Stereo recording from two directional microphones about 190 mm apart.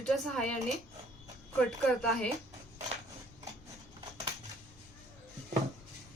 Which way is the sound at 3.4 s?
15° right (ahead or behind).